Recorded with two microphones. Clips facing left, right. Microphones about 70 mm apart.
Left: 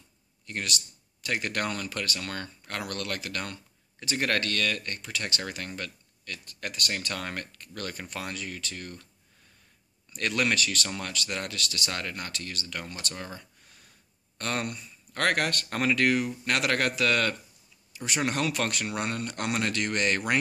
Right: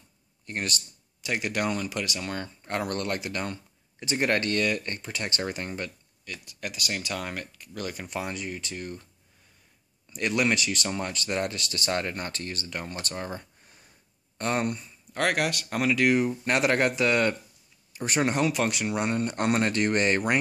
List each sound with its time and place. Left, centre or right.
0.5 s speech: right
1.2 s speech: centre
6.2 s speech: centre
10.1 s speech: centre
15.1 s speech: centre
16.1 s speech: right
17.9 s speech: right
18.3 s speech: centre